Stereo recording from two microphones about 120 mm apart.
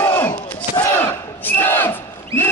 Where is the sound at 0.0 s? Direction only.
15° left (ahead or behind).